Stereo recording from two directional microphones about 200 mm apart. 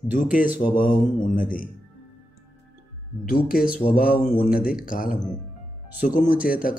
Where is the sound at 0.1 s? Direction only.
40° left (ahead or behind).